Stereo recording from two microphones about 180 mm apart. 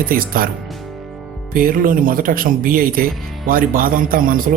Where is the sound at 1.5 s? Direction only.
50° right (ahead or behind).